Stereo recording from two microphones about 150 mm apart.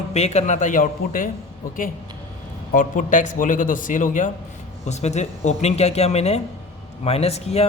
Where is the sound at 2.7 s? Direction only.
60° left (ahead or behind).